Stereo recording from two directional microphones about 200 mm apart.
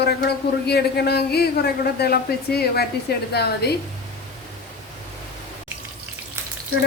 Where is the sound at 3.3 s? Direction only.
55° left (ahead or behind).